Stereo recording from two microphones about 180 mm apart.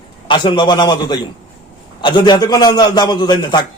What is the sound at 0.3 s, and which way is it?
A man's voice, 25° left (ahead or behind).